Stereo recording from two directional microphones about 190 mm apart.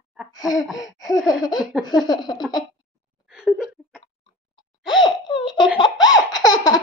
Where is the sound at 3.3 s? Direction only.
5° right (ahead or behind).